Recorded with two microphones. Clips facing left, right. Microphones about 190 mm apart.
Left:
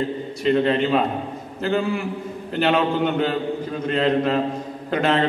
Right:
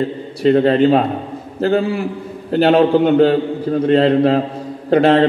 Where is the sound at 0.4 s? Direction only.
40° right (ahead or behind).